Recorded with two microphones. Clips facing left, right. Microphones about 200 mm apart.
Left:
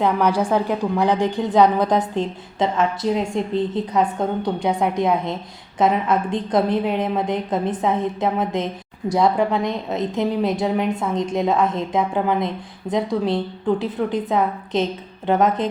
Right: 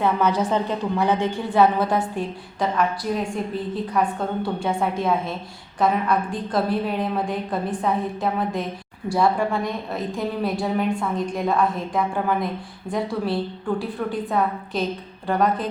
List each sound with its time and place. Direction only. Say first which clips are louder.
0.0 s a woman's voice: left 2 dB; 10° left (ahead or behind)